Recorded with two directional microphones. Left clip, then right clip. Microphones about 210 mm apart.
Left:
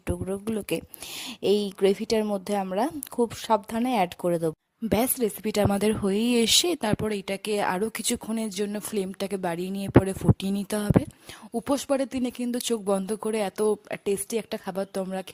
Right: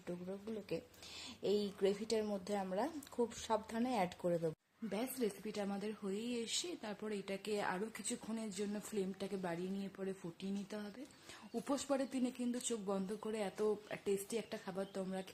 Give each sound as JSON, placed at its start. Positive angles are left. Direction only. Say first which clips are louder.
{"t": 0.0, "sound": "speech", "louder": "left 16 dB", "side_deg": 55}
{"t": 11.6, "sound": "speech", "louder": "left 13 dB", "side_deg": 45}